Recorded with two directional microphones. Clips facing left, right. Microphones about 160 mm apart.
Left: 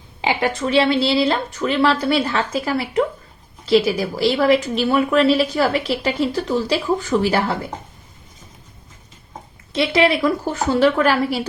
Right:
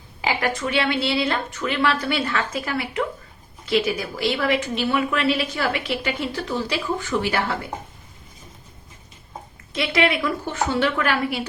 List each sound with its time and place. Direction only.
0.2 s a woman's voice: 25° left (ahead or behind)
9.7 s a woman's voice: 30° left (ahead or behind)